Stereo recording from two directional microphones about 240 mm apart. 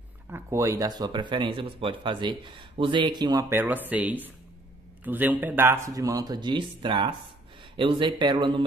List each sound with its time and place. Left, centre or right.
0.3 s a man's voice: centre